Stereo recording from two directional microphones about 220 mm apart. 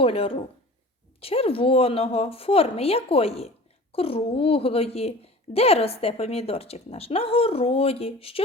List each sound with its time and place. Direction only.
0.0 s a woman's voice: 25° left (ahead or behind)